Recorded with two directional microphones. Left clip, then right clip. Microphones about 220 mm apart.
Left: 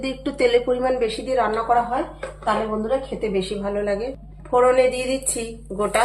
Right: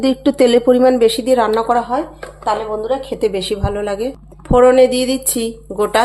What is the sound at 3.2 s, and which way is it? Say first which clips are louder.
A woman's voice: right 6 dB; 50° right (ahead or behind).